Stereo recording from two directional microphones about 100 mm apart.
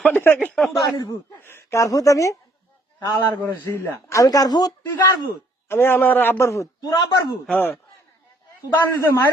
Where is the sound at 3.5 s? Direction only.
30° left (ahead or behind).